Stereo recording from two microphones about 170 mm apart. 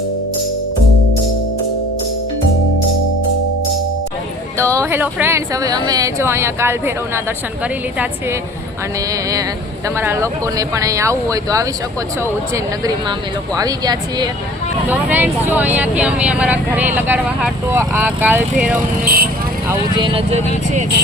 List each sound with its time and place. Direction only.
4.5 s speech: 15° right (ahead or behind)
9.9 s speech: 15° right (ahead or behind)
13.6 s speech: 25° right (ahead or behind)
14.8 s speech: 10° right (ahead or behind)
19.0 s speech: 60° right (ahead or behind)
20.0 s speech: 30° right (ahead or behind)